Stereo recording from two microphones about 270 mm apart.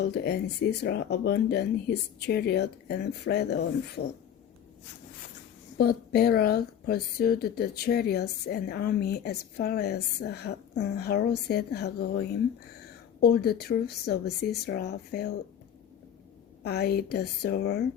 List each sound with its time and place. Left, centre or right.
0.0 s speech: left
5.7 s speech: left
16.6 s speech: left